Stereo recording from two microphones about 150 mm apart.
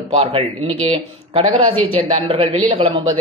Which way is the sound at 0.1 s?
40° right (ahead or behind).